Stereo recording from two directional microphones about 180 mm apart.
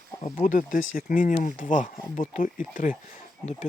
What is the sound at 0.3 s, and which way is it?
Speech, 50° left (ahead or behind).